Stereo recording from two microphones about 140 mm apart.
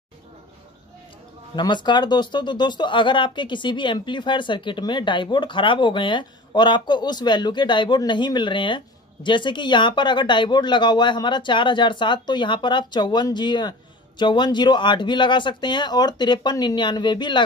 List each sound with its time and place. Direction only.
1.5 s speech: 35° left (ahead or behind)